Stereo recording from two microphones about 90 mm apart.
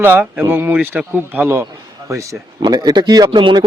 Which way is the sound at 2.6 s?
50° right (ahead or behind).